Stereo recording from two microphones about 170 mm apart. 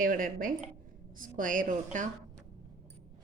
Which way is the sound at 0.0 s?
55° right (ahead or behind).